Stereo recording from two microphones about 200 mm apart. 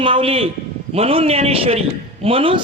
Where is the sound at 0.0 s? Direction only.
25° right (ahead or behind).